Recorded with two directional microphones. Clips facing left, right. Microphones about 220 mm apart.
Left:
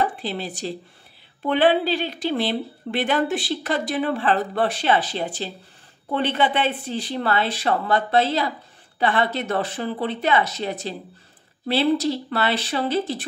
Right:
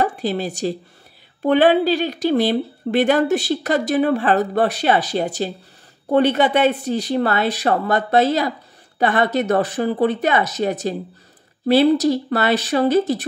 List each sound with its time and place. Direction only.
0.0 s speech: 45° right (ahead or behind)